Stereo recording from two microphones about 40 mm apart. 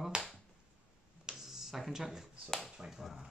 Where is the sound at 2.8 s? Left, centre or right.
Centre.